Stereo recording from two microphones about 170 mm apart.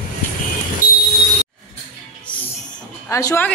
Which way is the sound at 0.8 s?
55° left (ahead or behind).